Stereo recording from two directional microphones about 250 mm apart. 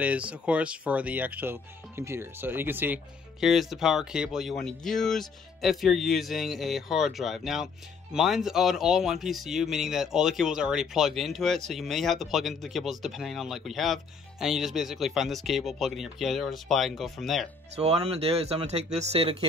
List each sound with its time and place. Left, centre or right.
0.0 s speech: centre
17.7 s speech: right